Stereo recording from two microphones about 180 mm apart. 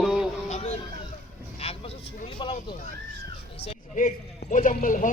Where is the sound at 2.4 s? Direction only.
25° left (ahead or behind).